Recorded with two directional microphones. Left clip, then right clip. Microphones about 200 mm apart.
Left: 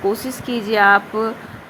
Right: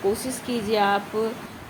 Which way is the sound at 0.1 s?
20° left (ahead or behind).